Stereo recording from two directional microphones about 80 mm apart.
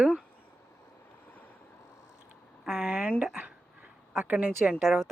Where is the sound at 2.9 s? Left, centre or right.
Centre.